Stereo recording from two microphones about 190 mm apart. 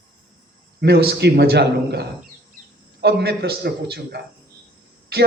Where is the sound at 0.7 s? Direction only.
55° right (ahead or behind).